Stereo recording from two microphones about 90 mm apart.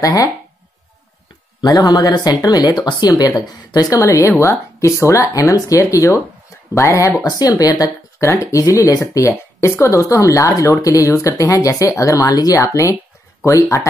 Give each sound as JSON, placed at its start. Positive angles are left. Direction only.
{"t": 0.0, "sound": "speech", "side_deg": 40}
{"t": 1.6, "sound": "speech", "side_deg": 40}
{"t": 8.3, "sound": "speech", "side_deg": 30}